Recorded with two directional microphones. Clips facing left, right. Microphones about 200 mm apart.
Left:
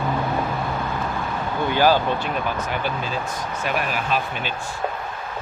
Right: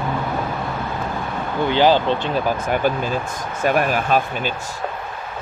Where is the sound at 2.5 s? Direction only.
50° right (ahead or behind).